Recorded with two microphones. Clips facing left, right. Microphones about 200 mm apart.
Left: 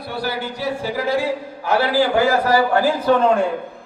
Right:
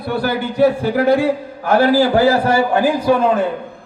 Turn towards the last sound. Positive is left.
turn(degrees=-5)  # may be behind; listen again after turning